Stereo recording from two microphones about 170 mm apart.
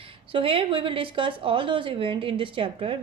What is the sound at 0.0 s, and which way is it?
A woman's voice, 30° right (ahead or behind).